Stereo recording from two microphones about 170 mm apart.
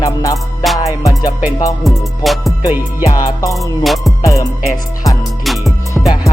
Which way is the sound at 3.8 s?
Centre (ahead or behind).